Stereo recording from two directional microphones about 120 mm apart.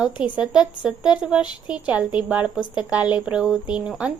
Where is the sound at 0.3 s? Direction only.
5° right (ahead or behind).